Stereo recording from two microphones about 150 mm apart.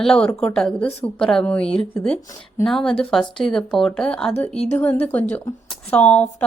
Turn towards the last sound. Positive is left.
turn(degrees=10)  # may be behind; listen again after turning